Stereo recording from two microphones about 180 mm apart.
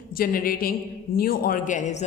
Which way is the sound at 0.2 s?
55° left (ahead or behind).